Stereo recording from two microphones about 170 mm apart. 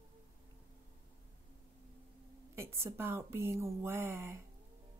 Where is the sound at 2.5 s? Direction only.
15° right (ahead or behind).